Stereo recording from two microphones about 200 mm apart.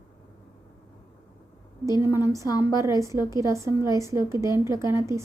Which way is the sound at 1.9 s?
15° right (ahead or behind).